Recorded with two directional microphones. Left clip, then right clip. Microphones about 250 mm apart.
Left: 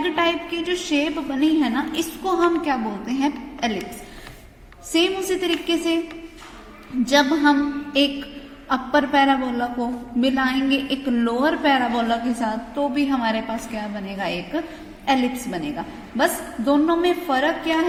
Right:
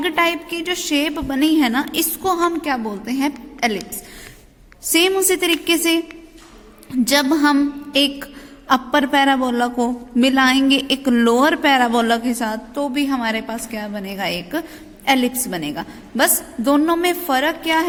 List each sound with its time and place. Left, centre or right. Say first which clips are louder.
0.0 s a woman's voice: right 3 dB; right
4.9 s a man's voice: right 5 dB; right
7.1 s a man's voice: right 1 dB; right